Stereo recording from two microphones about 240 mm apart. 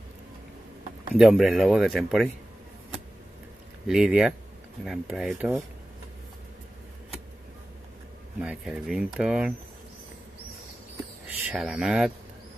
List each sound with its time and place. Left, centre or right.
1.1 s speech: centre
3.8 s speech: centre
8.4 s speech: centre
11.4 s speech: centre